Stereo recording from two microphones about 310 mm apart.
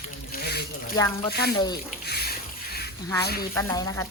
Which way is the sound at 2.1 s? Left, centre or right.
Left.